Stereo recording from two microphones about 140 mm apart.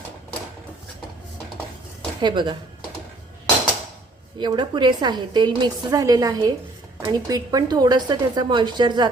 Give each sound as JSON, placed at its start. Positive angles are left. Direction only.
{"t": 2.2, "sound": "a woman's voice", "side_deg": -35}
{"t": 4.4, "sound": "a woman's voice", "side_deg": -30}